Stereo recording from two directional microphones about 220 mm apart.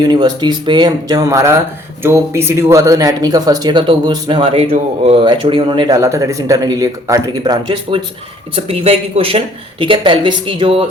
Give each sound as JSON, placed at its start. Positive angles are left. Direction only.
{"t": 0.0, "sound": "speech", "side_deg": -20}